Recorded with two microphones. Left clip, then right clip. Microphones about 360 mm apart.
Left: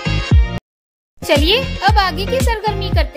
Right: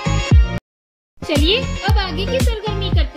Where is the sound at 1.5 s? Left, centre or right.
Left.